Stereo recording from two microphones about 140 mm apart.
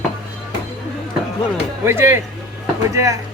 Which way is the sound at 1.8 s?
20° right (ahead or behind).